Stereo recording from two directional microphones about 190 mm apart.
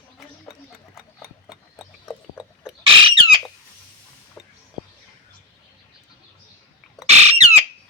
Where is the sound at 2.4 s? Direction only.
5° right (ahead or behind).